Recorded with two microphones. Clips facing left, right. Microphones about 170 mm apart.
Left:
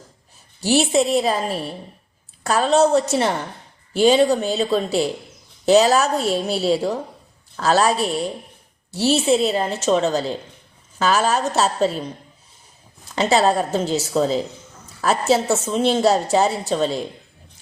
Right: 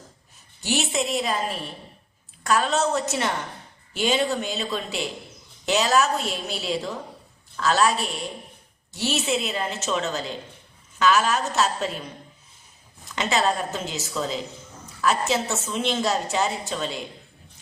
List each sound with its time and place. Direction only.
0.6 s a woman's voice: 35° left (ahead or behind)
13.1 s a woman's voice: 35° left (ahead or behind)